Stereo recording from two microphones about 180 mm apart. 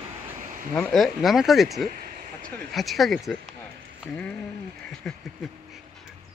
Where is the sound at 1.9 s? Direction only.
50° right (ahead or behind).